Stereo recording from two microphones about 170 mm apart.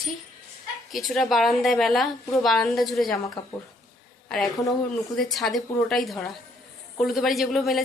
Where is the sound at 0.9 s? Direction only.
Centre (ahead or behind).